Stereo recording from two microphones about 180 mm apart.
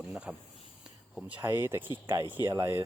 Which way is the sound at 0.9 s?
Centre (ahead or behind).